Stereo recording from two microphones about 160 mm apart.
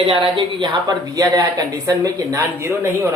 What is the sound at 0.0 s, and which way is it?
Speech, 30° right (ahead or behind).